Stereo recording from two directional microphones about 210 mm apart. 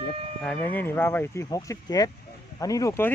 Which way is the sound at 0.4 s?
5° left (ahead or behind).